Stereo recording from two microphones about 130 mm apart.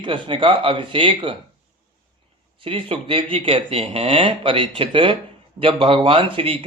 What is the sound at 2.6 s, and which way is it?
Speech, 45° right (ahead or behind).